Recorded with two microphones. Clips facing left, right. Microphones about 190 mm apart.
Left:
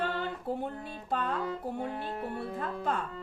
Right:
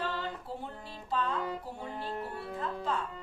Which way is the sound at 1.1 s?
55° left (ahead or behind).